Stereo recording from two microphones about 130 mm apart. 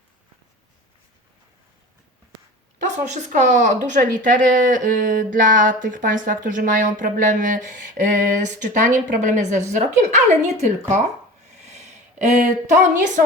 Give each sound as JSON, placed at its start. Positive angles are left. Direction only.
{"t": 2.8, "sound": "speech", "side_deg": -65}
{"t": 11.6, "sound": "a sound", "side_deg": -60}
{"t": 12.6, "sound": "speech", "side_deg": -75}